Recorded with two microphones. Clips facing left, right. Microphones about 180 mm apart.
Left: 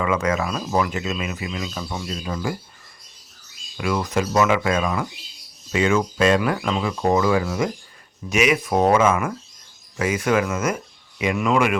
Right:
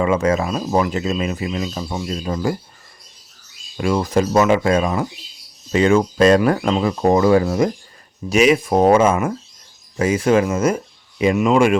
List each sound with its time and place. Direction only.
0.0 s speech: 30° right (ahead or behind)
3.8 s speech: 35° right (ahead or behind)